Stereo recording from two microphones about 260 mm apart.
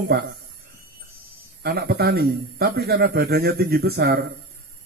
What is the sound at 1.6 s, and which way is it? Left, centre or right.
A man's voice, right.